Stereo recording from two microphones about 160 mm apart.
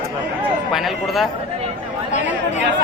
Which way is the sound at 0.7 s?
Centre (ahead or behind).